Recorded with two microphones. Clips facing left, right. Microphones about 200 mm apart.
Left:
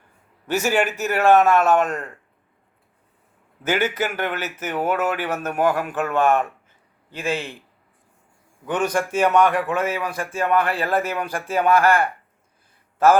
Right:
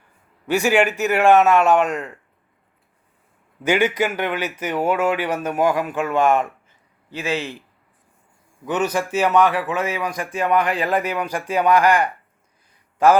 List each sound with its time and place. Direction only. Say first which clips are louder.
0.4 s speech: right 3 dB; 10° right (ahead or behind)
3.6 s speech: right 3 dB; 15° right (ahead or behind)
8.6 s speech: right 1 dB; 10° right (ahead or behind)